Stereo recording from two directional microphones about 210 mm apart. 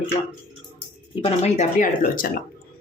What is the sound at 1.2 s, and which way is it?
Speech, 30° left (ahead or behind).